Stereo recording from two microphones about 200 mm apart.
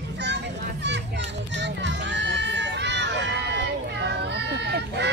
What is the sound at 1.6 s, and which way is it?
Run, 60° right (ahead or behind).